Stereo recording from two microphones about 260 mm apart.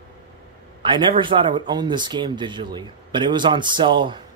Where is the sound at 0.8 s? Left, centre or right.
Centre.